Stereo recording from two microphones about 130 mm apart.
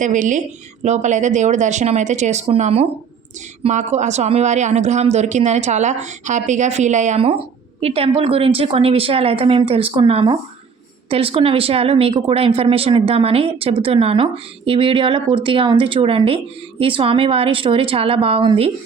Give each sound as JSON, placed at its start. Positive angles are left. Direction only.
{"t": 0.0, "sound": "speech", "side_deg": -75}
{"t": 7.2, "sound": "a woman's voice", "side_deg": -50}